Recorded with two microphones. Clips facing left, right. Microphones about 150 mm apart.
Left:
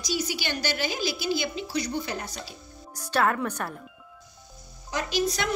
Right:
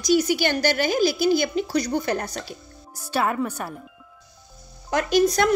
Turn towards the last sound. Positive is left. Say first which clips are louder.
# right 8 dB
turn(degrees=-50)  # may be behind; listen again after turning